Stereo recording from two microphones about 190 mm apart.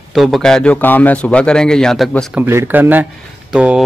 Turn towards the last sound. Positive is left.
turn(degrees=-5)  # may be behind; listen again after turning